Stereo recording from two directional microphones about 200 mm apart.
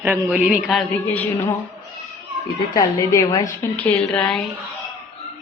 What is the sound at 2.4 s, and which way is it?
Speech, 15° left (ahead or behind).